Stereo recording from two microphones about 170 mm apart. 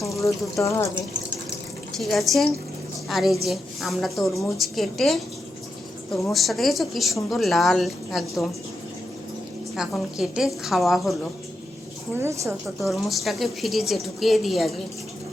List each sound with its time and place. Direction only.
0.6 s speech: 15° left (ahead or behind)
2.0 s a woman's voice: centre (ahead or behind)
6.3 s a woman's voice: centre (ahead or behind)
9.7 s a woman's voice: centre (ahead or behind)
12.2 s a woman's voice: 15° right (ahead or behind)
12.6 s a woman's voice: centre (ahead or behind)